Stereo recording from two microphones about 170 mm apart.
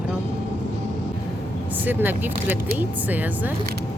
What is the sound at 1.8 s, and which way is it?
Speech, 10° right (ahead or behind).